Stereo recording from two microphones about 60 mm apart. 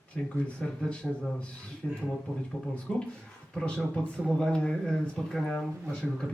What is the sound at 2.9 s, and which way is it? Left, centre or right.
A man's voice, centre.